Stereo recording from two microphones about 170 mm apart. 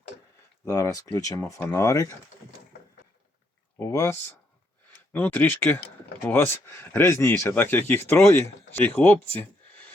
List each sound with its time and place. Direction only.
0.6 s speech: 20° left (ahead or behind)
3.8 s speech: 15° left (ahead or behind)